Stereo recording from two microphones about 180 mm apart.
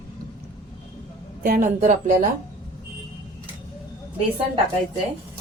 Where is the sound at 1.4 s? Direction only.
50° right (ahead or behind).